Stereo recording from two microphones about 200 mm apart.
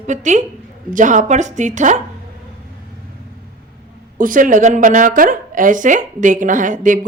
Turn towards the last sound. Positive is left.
turn(degrees=-40)  # may be behind; listen again after turning